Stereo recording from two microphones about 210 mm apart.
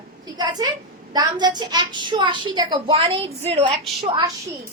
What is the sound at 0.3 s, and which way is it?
A woman's voice, 20° right (ahead or behind).